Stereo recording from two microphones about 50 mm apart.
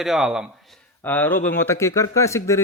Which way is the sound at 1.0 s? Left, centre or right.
Left.